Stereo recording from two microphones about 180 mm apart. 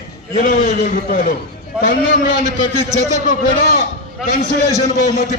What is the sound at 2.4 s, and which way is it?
Speech, 40° right (ahead or behind).